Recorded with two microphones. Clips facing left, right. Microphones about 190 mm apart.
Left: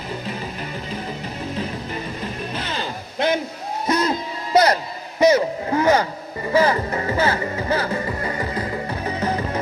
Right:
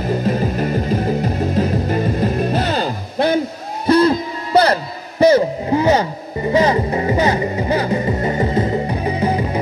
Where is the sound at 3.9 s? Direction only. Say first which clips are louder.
Right 9 dB; 30° right (ahead or behind).